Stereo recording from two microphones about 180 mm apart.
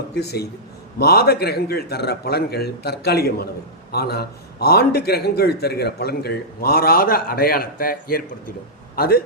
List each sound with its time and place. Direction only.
0.2 s a man's voice: 60° left (ahead or behind)